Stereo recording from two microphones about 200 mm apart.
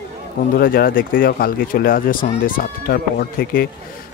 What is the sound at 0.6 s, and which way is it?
A man's voice, 45° left (ahead or behind).